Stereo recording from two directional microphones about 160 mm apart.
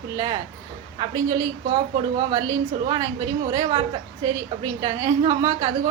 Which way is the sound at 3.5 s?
30° right (ahead or behind).